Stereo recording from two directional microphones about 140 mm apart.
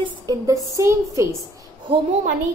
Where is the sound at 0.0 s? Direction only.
25° right (ahead or behind).